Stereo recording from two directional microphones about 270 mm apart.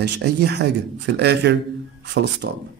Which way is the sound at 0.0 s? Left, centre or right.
Right.